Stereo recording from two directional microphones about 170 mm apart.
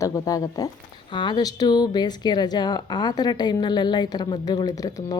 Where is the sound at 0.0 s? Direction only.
20° left (ahead or behind).